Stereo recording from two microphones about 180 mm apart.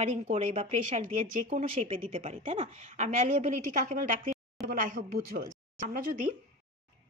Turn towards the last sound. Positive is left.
turn(degrees=-50)  # may be behind; listen again after turning